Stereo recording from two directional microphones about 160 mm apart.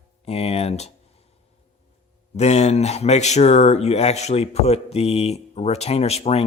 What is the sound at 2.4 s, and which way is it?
Speech, 45° left (ahead or behind).